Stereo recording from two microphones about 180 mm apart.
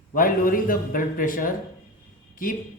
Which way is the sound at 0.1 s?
50° left (ahead or behind).